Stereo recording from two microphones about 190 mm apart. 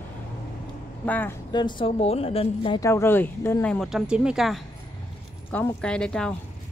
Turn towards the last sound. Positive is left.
turn(degrees=5)  # may be behind; listen again after turning